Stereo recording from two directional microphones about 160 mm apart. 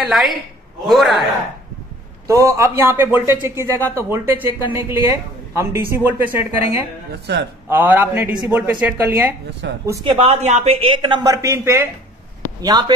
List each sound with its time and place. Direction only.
0.0 s a man's voice: centre (ahead or behind)
2.2 s speech: 20° right (ahead or behind)
7.1 s speech: 90° right
7.7 s speech: 10° right (ahead or behind)
9.6 s speech: 90° right
10.0 s speech: 40° right (ahead or behind)